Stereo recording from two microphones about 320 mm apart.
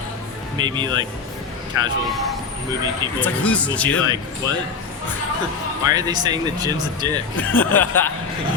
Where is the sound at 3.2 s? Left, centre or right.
Centre.